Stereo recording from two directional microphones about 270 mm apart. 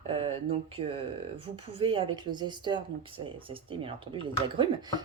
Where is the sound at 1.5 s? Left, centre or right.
Centre.